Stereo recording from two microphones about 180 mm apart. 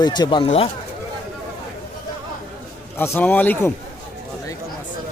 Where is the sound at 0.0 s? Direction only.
25° left (ahead or behind).